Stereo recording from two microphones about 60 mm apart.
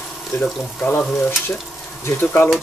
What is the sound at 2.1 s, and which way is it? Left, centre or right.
Speech, left.